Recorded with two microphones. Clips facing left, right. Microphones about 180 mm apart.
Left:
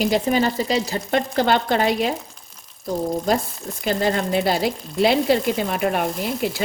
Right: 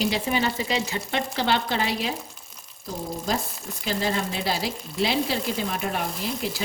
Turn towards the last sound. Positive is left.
turn(degrees=60)  # may be behind; listen again after turning